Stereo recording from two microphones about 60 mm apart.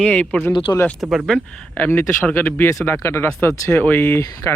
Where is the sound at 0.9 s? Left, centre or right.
Centre.